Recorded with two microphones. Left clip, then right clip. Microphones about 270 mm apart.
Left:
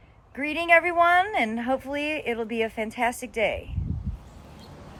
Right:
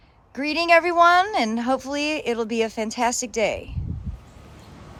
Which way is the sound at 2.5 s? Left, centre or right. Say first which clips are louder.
Right 3 dB; right.